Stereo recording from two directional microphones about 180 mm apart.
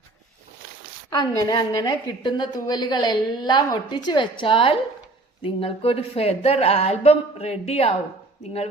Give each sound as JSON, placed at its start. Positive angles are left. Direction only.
{"t": 1.4, "sound": "a woman's voice", "side_deg": 20}